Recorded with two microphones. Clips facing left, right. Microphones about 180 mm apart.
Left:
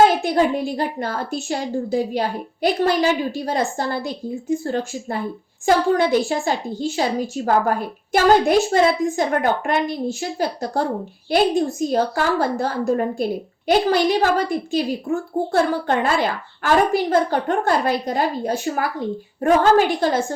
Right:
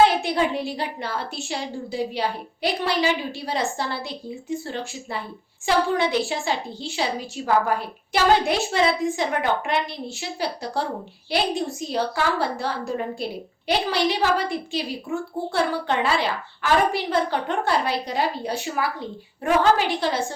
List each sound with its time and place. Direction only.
0.0 s a woman's voice: 45° left (ahead or behind)